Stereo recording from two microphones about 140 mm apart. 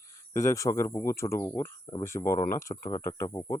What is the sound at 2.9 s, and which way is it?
Speech, 25° left (ahead or behind).